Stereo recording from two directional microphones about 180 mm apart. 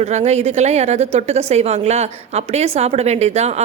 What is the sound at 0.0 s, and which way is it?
A woman's voice, 40° right (ahead or behind).